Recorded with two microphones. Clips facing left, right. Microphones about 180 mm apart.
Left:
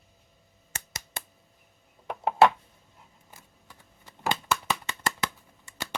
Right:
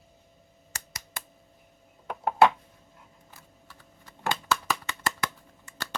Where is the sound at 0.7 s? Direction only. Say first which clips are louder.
Left 3 dB; 25° left (ahead or behind).